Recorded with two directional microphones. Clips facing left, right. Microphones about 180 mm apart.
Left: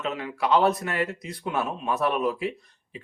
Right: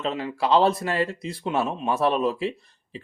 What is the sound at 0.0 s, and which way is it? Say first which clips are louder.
Speech: right 2 dB; 30° right (ahead or behind).